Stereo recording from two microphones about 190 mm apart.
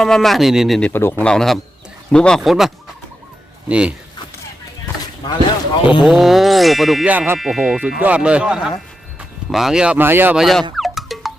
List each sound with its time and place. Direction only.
0.0 s speech: centre (ahead or behind)
5.2 s speech: 25° left (ahead or behind)
6.0 s speech: centre (ahead or behind)